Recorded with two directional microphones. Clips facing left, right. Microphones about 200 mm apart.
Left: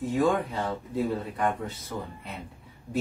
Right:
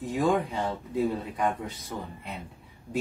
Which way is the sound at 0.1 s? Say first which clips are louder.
Even; 15° right (ahead or behind).